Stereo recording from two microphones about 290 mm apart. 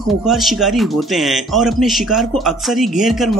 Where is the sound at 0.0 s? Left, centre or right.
Centre.